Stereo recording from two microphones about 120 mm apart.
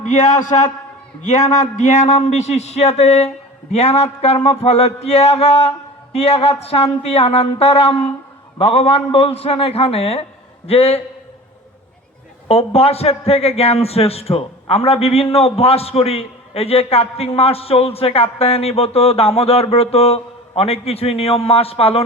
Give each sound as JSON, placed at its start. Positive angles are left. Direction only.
{"t": 0.0, "sound": "a man's voice", "side_deg": 90}
{"t": 12.5, "sound": "a man's voice", "side_deg": 55}